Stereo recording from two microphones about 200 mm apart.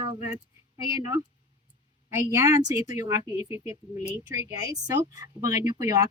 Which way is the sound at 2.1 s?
15° right (ahead or behind).